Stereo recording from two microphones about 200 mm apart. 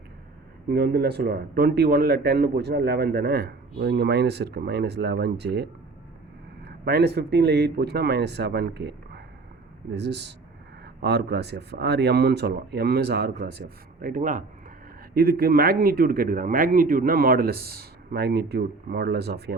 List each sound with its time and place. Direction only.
0.7 s speech: 55° right (ahead or behind)
6.7 s a man's voice: 55° right (ahead or behind)